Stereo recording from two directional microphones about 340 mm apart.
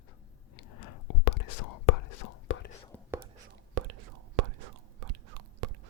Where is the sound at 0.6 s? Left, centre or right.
Left.